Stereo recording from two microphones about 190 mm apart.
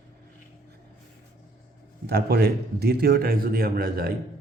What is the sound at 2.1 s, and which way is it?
A man's voice, 55° right (ahead or behind).